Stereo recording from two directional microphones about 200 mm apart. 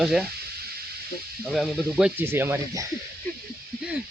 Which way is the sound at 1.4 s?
Centre (ahead or behind).